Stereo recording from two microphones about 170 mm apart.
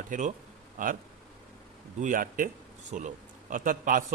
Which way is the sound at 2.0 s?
55° right (ahead or behind).